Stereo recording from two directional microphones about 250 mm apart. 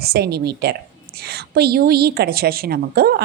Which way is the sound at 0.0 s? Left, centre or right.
Right.